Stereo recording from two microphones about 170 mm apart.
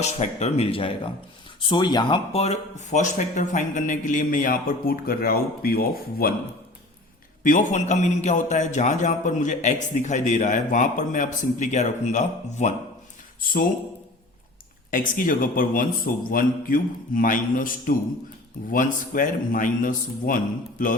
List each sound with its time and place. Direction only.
0.0 s a man's voice: 40° left (ahead or behind); by 6.3 s 60° left (ahead or behind)
7.4 s a man's voice: 45° left (ahead or behind)
14.8 s a man's voice: 55° left (ahead or behind)